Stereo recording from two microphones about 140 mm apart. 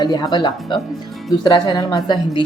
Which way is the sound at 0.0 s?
30° left (ahead or behind).